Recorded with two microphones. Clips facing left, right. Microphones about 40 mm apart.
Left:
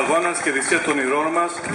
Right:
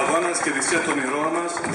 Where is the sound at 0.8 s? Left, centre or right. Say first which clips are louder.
Left 3 dB; centre.